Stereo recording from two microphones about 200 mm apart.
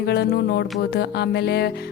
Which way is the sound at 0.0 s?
55° left (ahead or behind).